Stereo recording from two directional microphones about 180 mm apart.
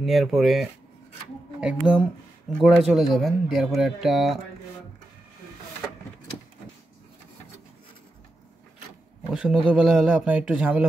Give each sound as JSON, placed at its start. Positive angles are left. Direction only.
{"t": 0.0, "sound": "speech", "side_deg": 0}
{"t": 9.3, "sound": "speech", "side_deg": -5}